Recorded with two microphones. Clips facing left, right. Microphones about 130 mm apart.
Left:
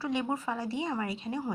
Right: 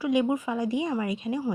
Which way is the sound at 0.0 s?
15° right (ahead or behind).